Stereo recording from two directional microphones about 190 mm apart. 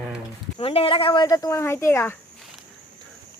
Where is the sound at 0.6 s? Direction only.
30° left (ahead or behind); by 2.2 s 10° left (ahead or behind).